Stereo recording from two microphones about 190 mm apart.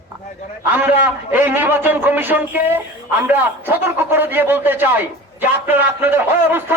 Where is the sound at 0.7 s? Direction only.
10° right (ahead or behind).